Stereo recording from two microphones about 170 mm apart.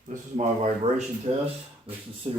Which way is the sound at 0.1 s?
45° right (ahead or behind).